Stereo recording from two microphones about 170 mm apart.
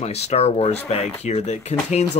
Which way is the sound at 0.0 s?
40° left (ahead or behind).